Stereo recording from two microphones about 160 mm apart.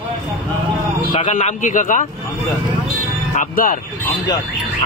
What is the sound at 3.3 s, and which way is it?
Speech, 60° left (ahead or behind).